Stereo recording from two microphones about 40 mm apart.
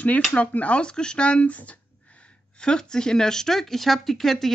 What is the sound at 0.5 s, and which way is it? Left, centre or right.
Speech, left.